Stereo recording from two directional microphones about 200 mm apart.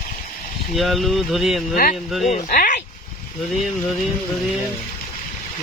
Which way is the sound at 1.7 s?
45° left (ahead or behind).